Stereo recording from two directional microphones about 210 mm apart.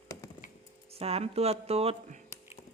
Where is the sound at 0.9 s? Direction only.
30° right (ahead or behind).